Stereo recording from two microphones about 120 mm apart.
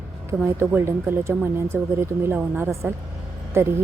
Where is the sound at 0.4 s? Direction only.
20° right (ahead or behind).